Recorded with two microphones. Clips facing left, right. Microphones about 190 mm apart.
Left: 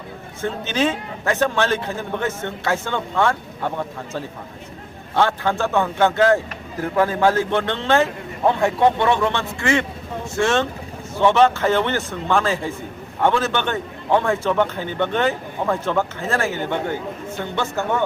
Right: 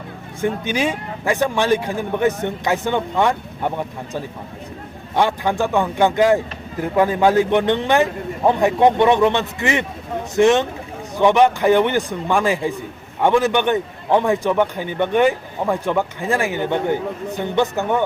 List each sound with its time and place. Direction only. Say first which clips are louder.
0.4 s a man's voice: right 1 dB; 10° right (ahead or behind)